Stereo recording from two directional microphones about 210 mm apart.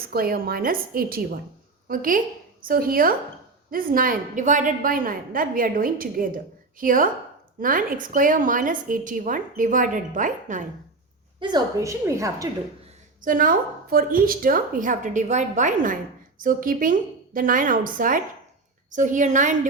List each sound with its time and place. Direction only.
0.1 s a woman's voice: 45° right (ahead or behind)
11.3 s a woman's voice: 20° right (ahead or behind)
13.2 s a woman's voice: 40° right (ahead or behind)